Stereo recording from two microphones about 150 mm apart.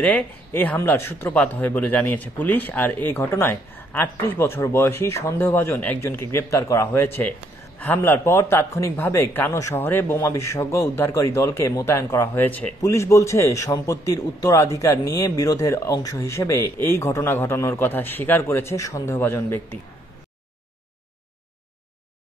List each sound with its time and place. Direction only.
0.0 s a man's voice: 10° left (ahead or behind)